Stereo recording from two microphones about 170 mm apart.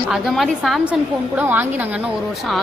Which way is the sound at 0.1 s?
Centre (ahead or behind).